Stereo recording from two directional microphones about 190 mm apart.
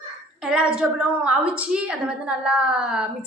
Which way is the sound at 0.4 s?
5° right (ahead or behind).